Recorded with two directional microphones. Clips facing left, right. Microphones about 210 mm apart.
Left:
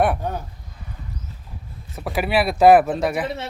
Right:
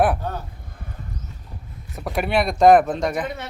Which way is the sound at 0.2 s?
15° left (ahead or behind).